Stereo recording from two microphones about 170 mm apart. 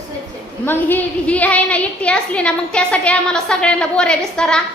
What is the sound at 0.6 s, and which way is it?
A woman's voice, 10° left (ahead or behind).